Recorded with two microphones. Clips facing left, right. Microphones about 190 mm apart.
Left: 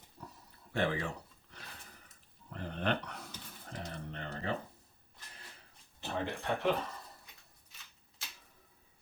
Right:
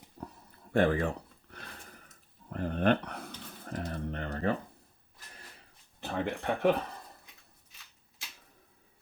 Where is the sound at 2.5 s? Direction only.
50° right (ahead or behind).